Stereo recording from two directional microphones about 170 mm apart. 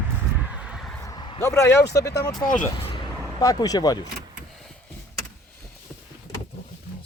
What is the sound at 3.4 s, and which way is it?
Speech, 20° left (ahead or behind).